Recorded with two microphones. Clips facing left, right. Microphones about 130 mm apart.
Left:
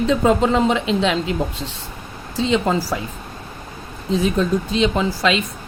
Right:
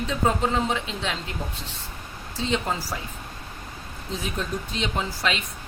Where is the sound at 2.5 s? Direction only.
90° left.